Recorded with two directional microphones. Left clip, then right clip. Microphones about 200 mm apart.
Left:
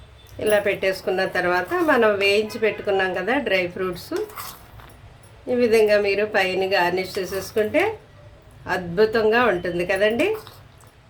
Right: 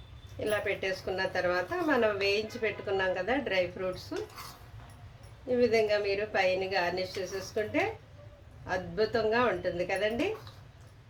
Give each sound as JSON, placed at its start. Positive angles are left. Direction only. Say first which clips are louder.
{"t": 0.3, "sound": "speech", "louder": "left 11 dB", "side_deg": 25}
{"t": 5.5, "sound": "speech", "louder": "left 9 dB", "side_deg": 25}